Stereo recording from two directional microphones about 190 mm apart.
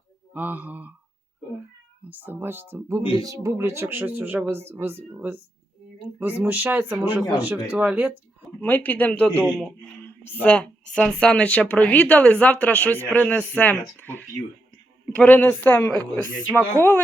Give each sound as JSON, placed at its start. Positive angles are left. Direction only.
{"t": 0.3, "sound": "speech", "side_deg": -10}
{"t": 2.0, "sound": "speech", "side_deg": -10}
{"t": 3.0, "sound": "speech", "side_deg": 30}
{"t": 3.2, "sound": "speech", "side_deg": -15}
{"t": 8.6, "sound": "a woman's voice", "side_deg": 10}